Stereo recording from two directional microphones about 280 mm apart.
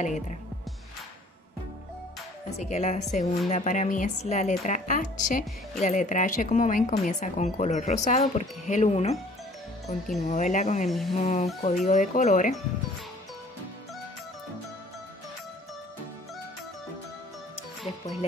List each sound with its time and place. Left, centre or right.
2.5 s speech: left
10.9 s speech: centre
11.1 s speech: left
17.9 s music: left